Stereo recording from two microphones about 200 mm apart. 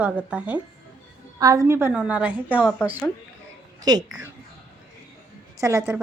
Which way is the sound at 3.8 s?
20° right (ahead or behind).